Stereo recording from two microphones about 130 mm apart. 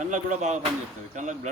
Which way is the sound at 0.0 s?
70° right (ahead or behind).